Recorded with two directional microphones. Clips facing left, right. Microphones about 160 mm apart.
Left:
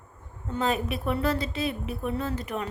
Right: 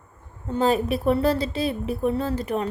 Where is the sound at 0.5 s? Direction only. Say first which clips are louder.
Right 6 dB; 35° right (ahead or behind).